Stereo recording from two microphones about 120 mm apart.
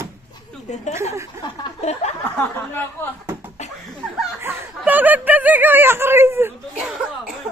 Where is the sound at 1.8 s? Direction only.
70° left (ahead or behind).